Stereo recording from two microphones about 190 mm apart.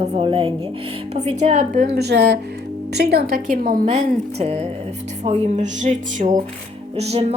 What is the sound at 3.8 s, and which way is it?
A woman's voice, 35° right (ahead or behind).